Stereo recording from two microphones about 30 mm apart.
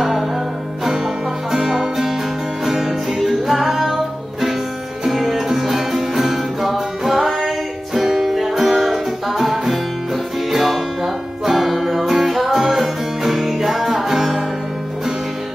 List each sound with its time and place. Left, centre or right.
0.8 s music: centre